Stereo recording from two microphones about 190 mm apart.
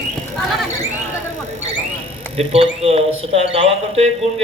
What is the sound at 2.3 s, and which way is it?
Speech, 30° right (ahead or behind).